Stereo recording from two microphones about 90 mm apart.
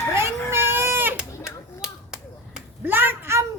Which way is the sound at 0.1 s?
30° right (ahead or behind).